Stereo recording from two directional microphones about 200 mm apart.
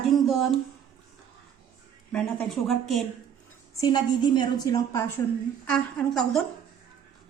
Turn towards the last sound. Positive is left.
turn(degrees=5)  # may be behind; listen again after turning